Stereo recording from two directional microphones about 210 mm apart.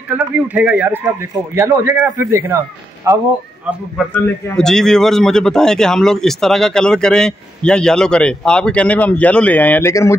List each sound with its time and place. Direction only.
0.1 s a man's voice: 5° right (ahead or behind)
4.1 s a man's voice: 5° left (ahead or behind)